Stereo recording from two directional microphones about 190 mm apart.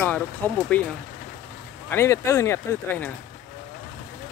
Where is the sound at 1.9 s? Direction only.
15° left (ahead or behind).